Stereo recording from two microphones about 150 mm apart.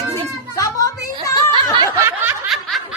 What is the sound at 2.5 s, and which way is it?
Snicker, centre (ahead or behind).